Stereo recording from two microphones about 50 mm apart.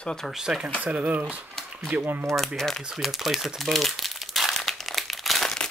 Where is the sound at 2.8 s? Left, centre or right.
Centre.